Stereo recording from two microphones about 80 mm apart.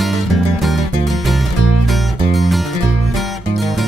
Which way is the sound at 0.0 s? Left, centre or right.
Centre.